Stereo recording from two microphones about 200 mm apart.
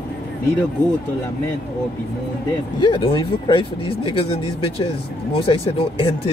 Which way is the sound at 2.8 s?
25° left (ahead or behind).